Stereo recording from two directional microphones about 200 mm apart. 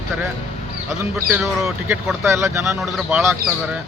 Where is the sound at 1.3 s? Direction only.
5° right (ahead or behind).